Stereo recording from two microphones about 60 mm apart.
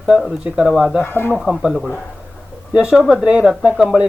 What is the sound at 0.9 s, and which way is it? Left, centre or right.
Speech, left.